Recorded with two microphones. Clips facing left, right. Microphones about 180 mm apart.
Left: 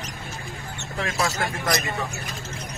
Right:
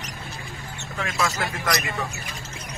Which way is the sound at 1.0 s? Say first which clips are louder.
Left 1 dB; 35° left (ahead or behind).